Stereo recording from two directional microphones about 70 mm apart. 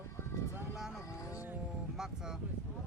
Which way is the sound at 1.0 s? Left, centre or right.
Left.